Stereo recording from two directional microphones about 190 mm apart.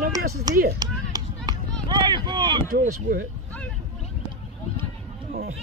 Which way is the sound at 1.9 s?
25° right (ahead or behind).